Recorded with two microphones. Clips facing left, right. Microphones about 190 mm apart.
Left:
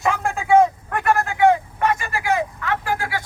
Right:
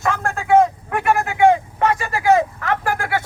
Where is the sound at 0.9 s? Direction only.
10° right (ahead or behind).